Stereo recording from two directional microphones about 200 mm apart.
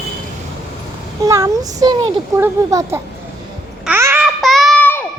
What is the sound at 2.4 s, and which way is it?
Speech, 15° right (ahead or behind).